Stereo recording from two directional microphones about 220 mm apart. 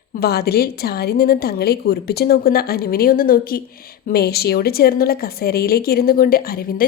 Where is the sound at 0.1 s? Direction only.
45° left (ahead or behind).